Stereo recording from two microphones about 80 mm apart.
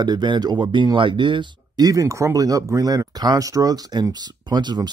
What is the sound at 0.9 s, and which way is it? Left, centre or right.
Speech, right.